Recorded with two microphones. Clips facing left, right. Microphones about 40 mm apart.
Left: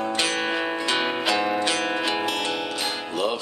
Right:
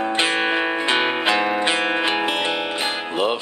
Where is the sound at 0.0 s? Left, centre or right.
Right.